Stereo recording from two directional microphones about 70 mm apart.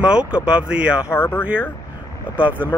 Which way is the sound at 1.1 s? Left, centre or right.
Left.